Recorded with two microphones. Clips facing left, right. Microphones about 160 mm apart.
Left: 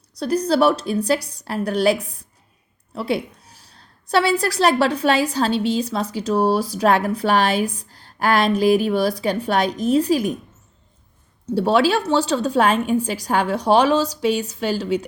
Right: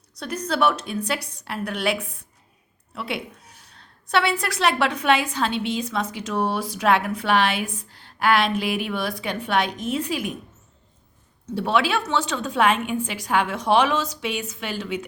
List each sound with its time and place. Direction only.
0.2 s a woman's voice: 35° left (ahead or behind)
11.5 s a woman's voice: 35° left (ahead or behind)